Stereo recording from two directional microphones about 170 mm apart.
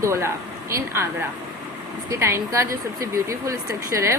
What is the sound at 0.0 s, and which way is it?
Speech, 15° right (ahead or behind).